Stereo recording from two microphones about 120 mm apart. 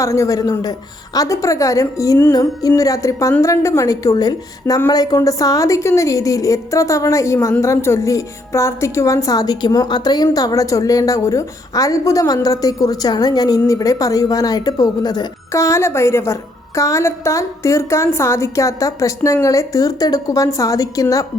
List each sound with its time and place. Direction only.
0.0 s a woman's voice: 25° left (ahead or behind)